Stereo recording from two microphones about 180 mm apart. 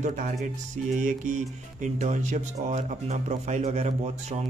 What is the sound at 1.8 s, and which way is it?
Speech, 40° right (ahead or behind).